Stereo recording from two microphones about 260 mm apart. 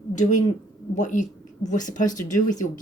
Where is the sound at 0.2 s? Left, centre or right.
Left.